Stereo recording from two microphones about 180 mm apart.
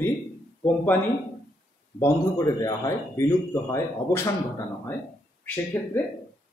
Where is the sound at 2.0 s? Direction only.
20° left (ahead or behind).